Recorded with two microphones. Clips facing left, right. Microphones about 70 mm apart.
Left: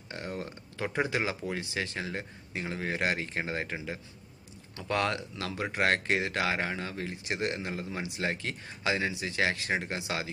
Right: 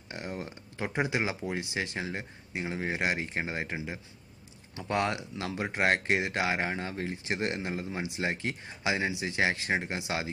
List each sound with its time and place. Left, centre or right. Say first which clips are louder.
0.1 s speech: even; right